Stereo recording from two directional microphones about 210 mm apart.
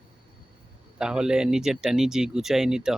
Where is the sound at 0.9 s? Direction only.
5° right (ahead or behind).